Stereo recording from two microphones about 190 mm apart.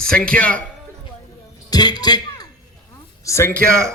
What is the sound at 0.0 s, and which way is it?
Speech, 5° left (ahead or behind).